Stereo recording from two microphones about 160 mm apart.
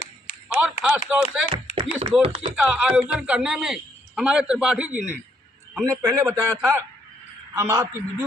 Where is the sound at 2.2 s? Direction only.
35° right (ahead or behind).